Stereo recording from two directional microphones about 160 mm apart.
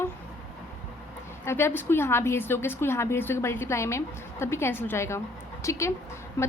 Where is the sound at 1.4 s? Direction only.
15° left (ahead or behind).